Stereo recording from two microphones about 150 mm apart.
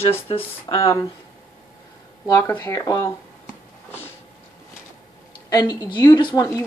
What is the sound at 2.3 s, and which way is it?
Speech, 20° left (ahead or behind).